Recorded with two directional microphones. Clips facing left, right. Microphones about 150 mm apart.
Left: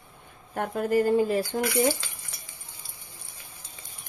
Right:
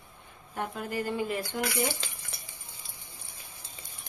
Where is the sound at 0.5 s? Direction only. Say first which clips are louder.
Left 9 dB; 50° left (ahead or behind).